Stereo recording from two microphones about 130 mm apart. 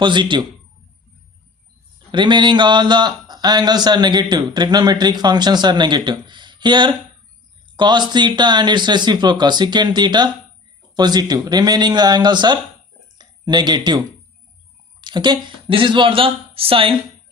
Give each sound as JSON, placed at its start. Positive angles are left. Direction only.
{"t": 0.0, "sound": "speech", "side_deg": -35}
{"t": 2.1, "sound": "speech", "side_deg": -35}
{"t": 15.0, "sound": "speech", "side_deg": -35}